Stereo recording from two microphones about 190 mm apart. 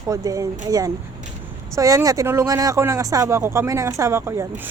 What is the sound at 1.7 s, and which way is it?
Speech, 15° right (ahead or behind).